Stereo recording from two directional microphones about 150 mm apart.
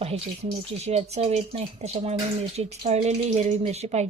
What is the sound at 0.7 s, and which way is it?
Speech, 45° right (ahead or behind).